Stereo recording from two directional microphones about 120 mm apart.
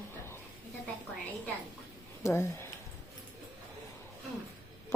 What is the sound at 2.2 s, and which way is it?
Speech, 20° left (ahead or behind).